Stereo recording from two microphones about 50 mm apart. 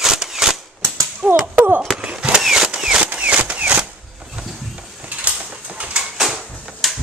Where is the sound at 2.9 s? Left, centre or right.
Right.